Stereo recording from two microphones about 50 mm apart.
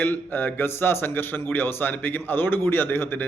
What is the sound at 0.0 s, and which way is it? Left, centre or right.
A man's voice, left.